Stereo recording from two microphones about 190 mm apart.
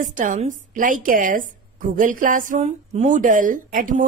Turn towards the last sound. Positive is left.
turn(degrees=-45)  # may be behind; listen again after turning